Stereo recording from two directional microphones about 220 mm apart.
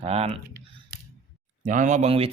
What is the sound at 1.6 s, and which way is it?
Speech, 35° right (ahead or behind).